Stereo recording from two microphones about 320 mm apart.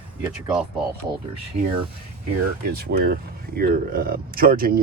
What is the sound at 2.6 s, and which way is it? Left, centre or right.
Speech, right.